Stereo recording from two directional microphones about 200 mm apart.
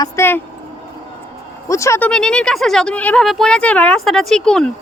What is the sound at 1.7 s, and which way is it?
Speech, 15° left (ahead or behind).